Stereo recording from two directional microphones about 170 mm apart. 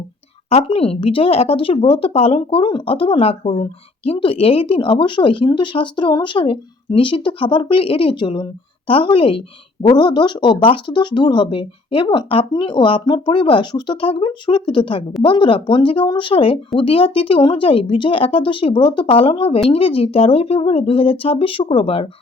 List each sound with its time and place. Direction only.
0.5 s speech: 35° left (ahead or behind)